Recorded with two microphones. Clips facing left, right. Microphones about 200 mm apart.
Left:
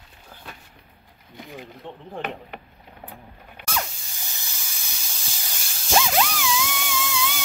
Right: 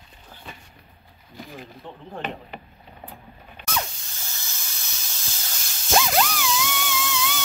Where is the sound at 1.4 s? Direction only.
20° left (ahead or behind).